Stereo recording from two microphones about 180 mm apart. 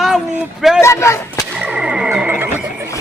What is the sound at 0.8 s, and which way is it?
Speech, 15° left (ahead or behind).